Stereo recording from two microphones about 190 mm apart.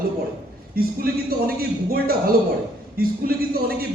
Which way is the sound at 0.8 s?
50° right (ahead or behind).